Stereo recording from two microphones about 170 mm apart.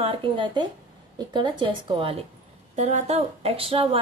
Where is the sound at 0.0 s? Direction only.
30° right (ahead or behind).